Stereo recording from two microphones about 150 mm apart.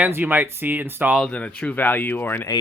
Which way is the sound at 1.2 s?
5° left (ahead or behind).